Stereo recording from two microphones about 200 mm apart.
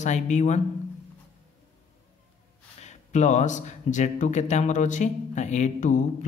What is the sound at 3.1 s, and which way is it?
Speech, 35° left (ahead or behind).